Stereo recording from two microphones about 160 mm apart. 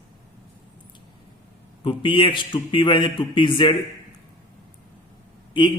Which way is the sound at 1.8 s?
30° left (ahead or behind).